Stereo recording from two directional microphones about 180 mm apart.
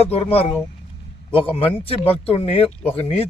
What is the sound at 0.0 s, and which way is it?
Speech, 35° left (ahead or behind).